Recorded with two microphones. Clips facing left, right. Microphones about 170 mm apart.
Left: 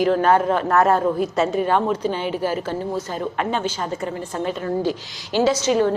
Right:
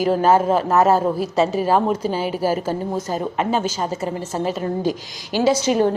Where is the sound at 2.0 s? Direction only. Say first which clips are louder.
Right 2 dB; 40° right (ahead or behind).